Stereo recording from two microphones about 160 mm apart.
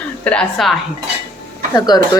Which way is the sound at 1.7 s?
25° left (ahead or behind).